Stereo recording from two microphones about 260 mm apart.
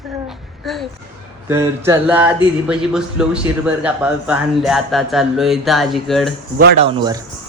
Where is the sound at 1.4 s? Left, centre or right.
Centre.